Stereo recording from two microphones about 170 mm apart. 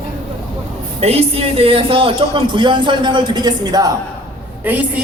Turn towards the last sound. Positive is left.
turn(degrees=-10)  # may be behind; listen again after turning